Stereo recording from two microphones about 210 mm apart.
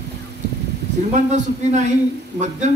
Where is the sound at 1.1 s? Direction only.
35° right (ahead or behind).